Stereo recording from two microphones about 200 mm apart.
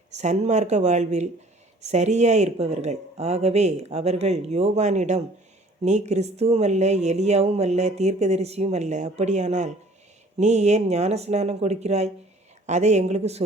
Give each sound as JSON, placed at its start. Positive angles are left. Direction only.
{"t": 0.1, "sound": "speech", "side_deg": -35}